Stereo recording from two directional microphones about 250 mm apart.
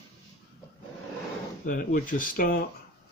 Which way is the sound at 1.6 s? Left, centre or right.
Left.